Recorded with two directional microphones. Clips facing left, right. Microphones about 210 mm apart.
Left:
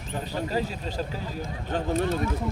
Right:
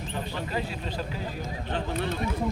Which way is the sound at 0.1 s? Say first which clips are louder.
Left 4 dB; 40° left (ahead or behind).